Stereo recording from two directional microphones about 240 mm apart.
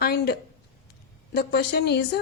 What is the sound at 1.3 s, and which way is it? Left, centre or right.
Speech, left.